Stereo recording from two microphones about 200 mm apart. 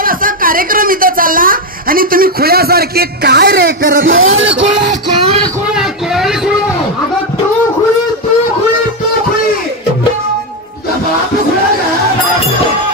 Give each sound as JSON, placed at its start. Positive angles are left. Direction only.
{"t": 0.0, "sound": "speech", "side_deg": -45}
{"t": 4.0, "sound": "speech", "side_deg": -80}
{"t": 5.8, "sound": "a sound", "side_deg": 0}